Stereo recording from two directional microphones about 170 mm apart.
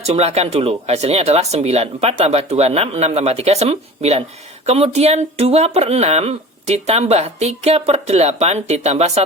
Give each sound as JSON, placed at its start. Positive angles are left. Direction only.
{"t": 0.0, "sound": "speech", "side_deg": -40}